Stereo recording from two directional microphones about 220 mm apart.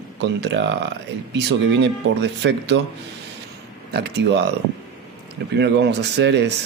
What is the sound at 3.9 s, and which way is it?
Speech, 50° right (ahead or behind).